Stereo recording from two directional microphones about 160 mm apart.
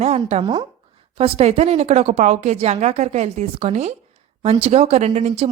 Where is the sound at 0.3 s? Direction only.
40° right (ahead or behind).